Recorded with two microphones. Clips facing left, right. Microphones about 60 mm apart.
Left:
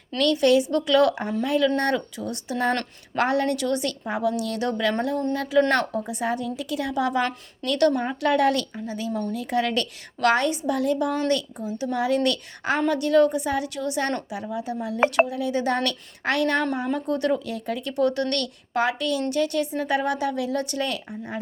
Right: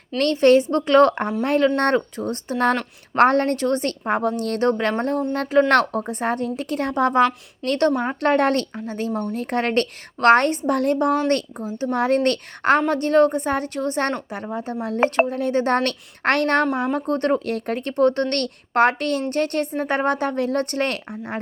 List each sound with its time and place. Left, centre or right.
0.2 s speech: right
5.7 s speech: right
6.0 s speech: right